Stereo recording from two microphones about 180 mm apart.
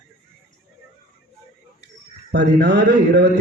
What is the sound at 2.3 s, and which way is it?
A man's voice, 70° right (ahead or behind).